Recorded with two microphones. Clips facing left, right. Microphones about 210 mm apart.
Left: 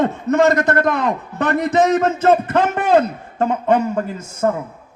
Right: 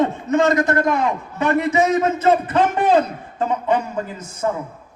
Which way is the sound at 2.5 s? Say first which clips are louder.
Left 1 dB; 50° left (ahead or behind).